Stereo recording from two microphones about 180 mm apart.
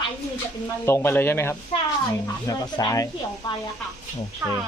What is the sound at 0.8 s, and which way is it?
Speech, 15° left (ahead or behind).